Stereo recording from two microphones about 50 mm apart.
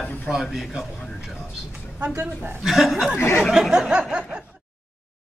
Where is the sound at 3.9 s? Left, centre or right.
Centre.